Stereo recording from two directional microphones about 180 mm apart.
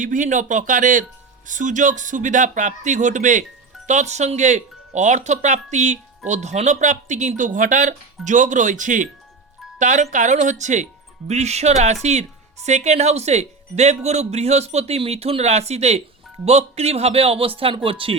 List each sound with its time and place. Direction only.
0.0 s speech: 45° right (ahead or behind)